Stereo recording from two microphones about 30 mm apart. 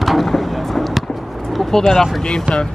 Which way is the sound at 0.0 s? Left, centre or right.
Centre.